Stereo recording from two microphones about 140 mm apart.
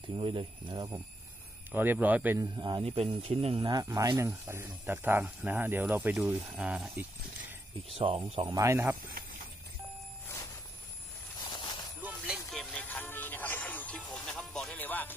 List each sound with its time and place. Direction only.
0.2 s speech: 35° right (ahead or behind)
1.7 s speech: 15° right (ahead or behind)
2.5 s speech: 35° right (ahead or behind); by 7.5 s 10° right (ahead or behind)
7.9 s speech: 45° right (ahead or behind)
8.5 s speech: 25° right (ahead or behind)
9.2 s horse: 90° right
11.3 s a sound: 30° left (ahead or behind)
12.0 s music: 10° right (ahead or behind)
12.4 s music: 5° left (ahead or behind)